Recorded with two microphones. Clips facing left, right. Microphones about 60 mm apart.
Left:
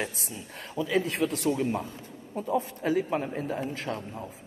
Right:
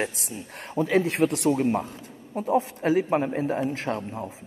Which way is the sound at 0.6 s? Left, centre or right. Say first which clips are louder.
Right 5 dB; right.